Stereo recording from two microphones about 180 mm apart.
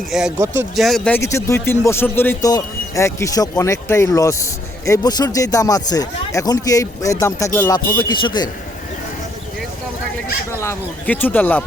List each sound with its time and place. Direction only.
0.1 s speech: 5° right (ahead or behind)
0.3 s speech: 15° right (ahead or behind)
0.8 s speech: centre (ahead or behind)
7.9 s speech: 25° left (ahead or behind)
10.6 s speech: 10° left (ahead or behind)